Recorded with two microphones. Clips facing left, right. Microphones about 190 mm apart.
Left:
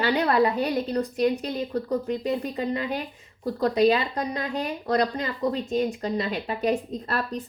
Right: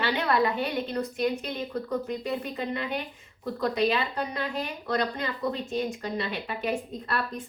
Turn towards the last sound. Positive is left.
turn(degrees=40)  # may be behind; listen again after turning